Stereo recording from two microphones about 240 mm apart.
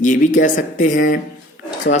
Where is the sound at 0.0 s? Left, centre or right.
Left.